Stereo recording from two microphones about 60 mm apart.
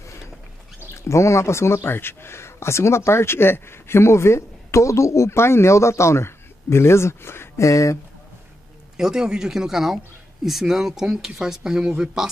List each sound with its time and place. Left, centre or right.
1.0 s speech: left
8.9 s speech: centre